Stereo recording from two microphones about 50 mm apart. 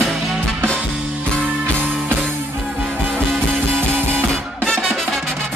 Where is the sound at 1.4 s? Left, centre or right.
Right.